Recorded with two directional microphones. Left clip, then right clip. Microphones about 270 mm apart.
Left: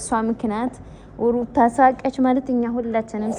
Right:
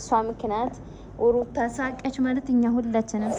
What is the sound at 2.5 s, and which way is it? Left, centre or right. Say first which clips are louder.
Speech: left 2 dB; centre.